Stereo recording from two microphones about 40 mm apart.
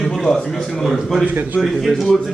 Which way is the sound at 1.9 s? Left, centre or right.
Centre.